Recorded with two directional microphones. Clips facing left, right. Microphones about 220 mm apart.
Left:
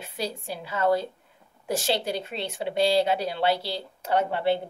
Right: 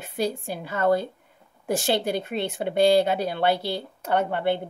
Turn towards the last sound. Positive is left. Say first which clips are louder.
# right 1 dB
turn(degrees=-55)  # may be behind; listen again after turning